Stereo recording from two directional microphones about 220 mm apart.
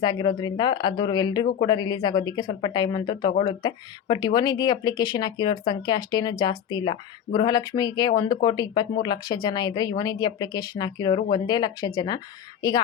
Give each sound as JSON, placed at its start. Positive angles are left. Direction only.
{"t": 0.0, "sound": "speech", "side_deg": 20}